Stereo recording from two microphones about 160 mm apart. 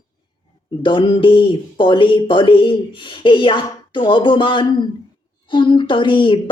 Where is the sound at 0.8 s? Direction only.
30° left (ahead or behind).